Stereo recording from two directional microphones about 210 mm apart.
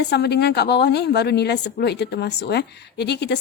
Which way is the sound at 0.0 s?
50° left (ahead or behind).